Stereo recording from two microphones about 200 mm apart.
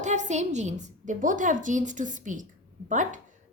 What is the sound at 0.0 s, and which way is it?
A woman's voice, 35° right (ahead or behind).